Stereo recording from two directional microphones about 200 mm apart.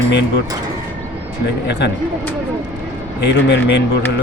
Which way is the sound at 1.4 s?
60° left (ahead or behind).